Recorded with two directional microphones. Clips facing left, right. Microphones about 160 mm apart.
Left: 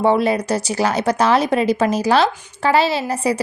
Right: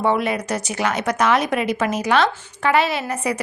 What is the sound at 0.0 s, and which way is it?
A woman's voice, 30° left (ahead or behind).